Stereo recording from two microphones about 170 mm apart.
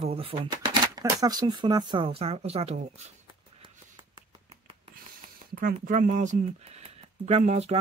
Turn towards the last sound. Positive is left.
turn(degrees=-40)  # may be behind; listen again after turning